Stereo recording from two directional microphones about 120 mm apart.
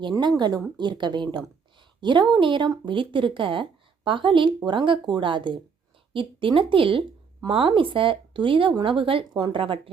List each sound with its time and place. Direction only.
0.0 s a woman's voice: 40° right (ahead or behind)